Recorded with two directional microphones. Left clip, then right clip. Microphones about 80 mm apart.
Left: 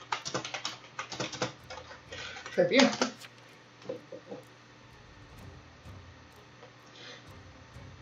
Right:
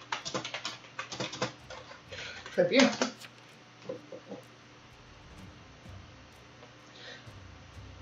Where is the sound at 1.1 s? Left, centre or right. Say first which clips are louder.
Even; left.